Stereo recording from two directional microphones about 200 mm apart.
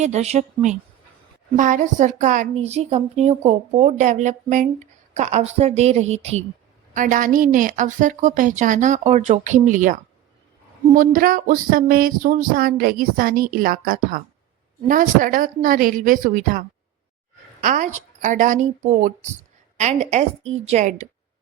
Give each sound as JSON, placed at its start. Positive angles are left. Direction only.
{"t": 0.0, "sound": "a woman's voice", "side_deg": -35}
{"t": 10.9, "sound": "a sound", "side_deg": -45}
{"t": 17.6, "sound": "a woman's voice", "side_deg": -40}